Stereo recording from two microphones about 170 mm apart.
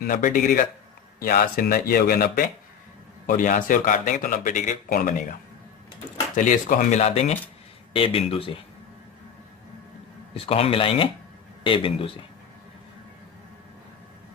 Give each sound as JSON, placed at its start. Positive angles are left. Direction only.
{"t": 0.0, "sound": "a man's voice", "side_deg": 50}
{"t": 6.3, "sound": "a man's voice", "side_deg": 50}
{"t": 10.3, "sound": "speech", "side_deg": 35}